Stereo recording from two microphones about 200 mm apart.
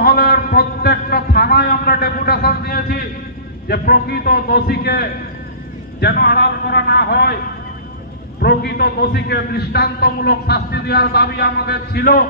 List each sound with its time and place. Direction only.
0.0 s a sound: 50° left (ahead or behind)
3.6 s a man's voice: 50° left (ahead or behind)
8.4 s a man's voice: 55° left (ahead or behind)